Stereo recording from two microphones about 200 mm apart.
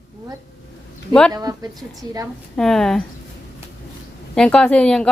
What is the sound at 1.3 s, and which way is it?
Speech, 20° right (ahead or behind).